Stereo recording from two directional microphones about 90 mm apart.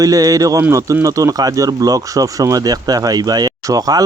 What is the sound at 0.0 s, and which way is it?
Speech, 40° right (ahead or behind).